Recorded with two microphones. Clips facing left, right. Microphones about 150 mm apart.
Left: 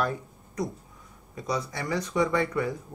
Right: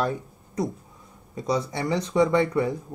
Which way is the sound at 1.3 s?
30° right (ahead or behind).